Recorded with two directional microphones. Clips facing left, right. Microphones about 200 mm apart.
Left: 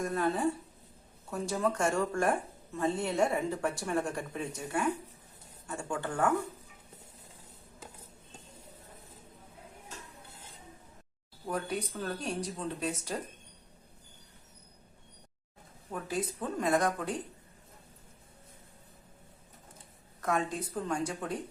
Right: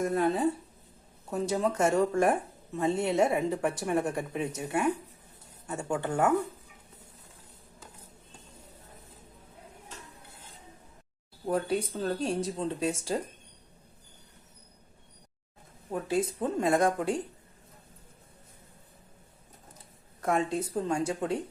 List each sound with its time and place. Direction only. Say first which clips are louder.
0.0 s a woman's voice: right 4 dB; 20° right (ahead or behind)
11.4 s a woman's voice: right 6 dB; 25° right (ahead or behind)
15.9 s a woman's voice: right 6 dB; 25° right (ahead or behind)
20.2 s a woman's voice: right 4 dB; 25° right (ahead or behind)